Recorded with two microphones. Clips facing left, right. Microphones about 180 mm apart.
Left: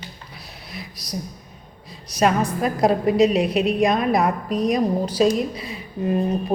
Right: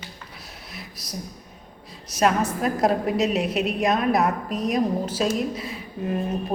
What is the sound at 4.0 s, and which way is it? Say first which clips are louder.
Speech: left 1 dB; 10° left (ahead or behind).